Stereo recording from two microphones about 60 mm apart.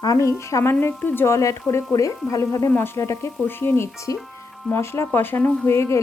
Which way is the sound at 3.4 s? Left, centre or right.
Left.